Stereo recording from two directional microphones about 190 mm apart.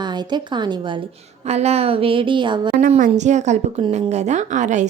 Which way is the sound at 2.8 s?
40° right (ahead or behind).